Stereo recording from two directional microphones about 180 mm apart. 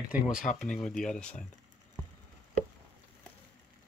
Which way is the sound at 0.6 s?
45° left (ahead or behind).